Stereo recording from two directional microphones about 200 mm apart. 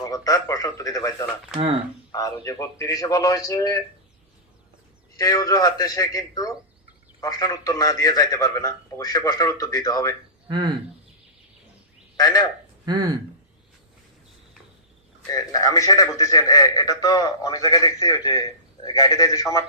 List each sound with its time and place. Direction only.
0.0 s speech: 15° left (ahead or behind)
2.1 s a man's voice: 15° left (ahead or behind)
5.1 s a man's voice: 15° left (ahead or behind)
12.1 s speech: 15° left (ahead or behind)
12.8 s speech: 20° right (ahead or behind)
15.3 s a man's voice: 20° left (ahead or behind)